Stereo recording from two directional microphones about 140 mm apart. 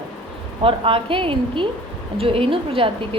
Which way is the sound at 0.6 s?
40° right (ahead or behind).